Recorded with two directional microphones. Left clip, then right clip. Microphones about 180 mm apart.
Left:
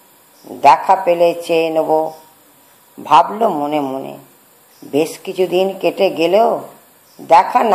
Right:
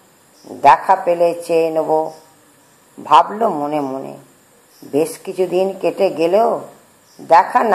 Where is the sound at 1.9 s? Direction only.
25° left (ahead or behind).